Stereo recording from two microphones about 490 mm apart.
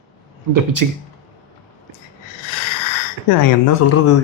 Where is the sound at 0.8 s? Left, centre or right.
Right.